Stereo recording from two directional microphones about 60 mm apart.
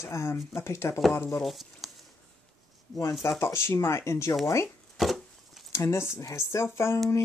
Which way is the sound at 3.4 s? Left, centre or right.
Left.